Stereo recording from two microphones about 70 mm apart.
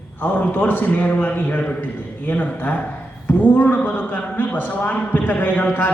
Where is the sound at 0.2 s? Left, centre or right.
Left.